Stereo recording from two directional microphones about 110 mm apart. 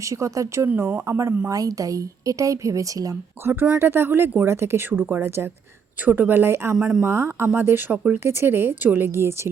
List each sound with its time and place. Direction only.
0.1 s speech: 30° right (ahead or behind)
3.4 s speech: 20° right (ahead or behind)
6.7 s speech: 5° right (ahead or behind)
7.0 s speech: 25° right (ahead or behind)